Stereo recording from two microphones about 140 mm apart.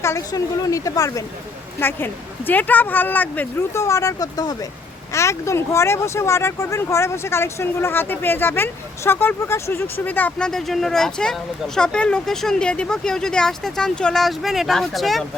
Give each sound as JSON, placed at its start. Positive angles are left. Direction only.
{"t": 0.0, "sound": "a woman's voice", "side_deg": 20}